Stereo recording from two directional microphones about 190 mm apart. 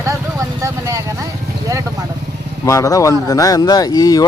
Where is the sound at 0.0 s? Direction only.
15° right (ahead or behind).